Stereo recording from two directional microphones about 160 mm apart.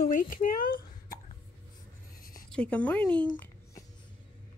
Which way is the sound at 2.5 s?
10° left (ahead or behind).